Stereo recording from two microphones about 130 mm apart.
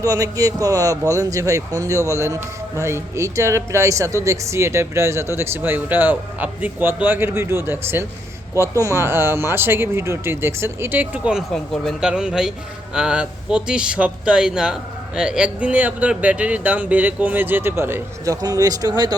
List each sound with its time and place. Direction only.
0.0 s speech: 25° right (ahead or behind); by 11.4 s 10° right (ahead or behind)
11.5 s a man's voice: 5° left (ahead or behind); by 18.3 s 20° right (ahead or behind)
18.4 s speech: 30° right (ahead or behind)